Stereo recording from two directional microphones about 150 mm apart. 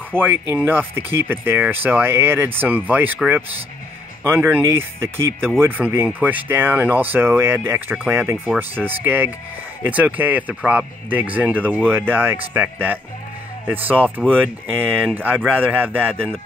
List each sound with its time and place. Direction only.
0.1 s speech: 15° right (ahead or behind)
4.2 s speech: 15° right (ahead or behind)